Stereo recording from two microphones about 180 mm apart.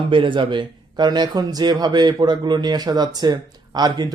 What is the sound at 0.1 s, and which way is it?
Speech, 30° right (ahead or behind).